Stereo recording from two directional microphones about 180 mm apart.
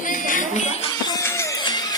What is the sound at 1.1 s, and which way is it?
Music, 15° left (ahead or behind).